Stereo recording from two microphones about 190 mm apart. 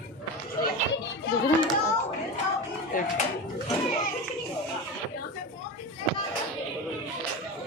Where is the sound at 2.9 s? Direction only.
45° left (ahead or behind).